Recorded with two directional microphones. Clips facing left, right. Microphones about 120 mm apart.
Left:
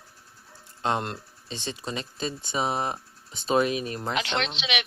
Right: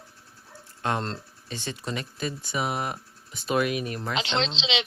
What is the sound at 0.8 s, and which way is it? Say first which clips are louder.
Speech: left 1 dB; 20° left (ahead or behind).